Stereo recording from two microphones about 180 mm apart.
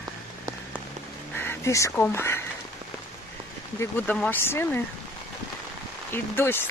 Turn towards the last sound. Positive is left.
turn(degrees=10)  # may be behind; listen again after turning